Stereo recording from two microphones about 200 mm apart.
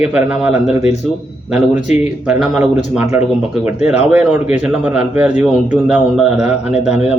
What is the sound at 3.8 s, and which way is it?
Speech, 35° left (ahead or behind).